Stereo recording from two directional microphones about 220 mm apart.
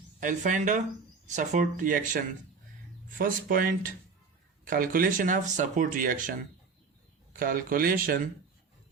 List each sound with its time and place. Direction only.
0.2 s speech: 35° right (ahead or behind)